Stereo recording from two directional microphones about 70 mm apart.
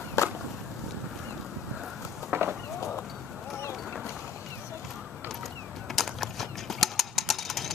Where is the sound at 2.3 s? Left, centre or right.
Right.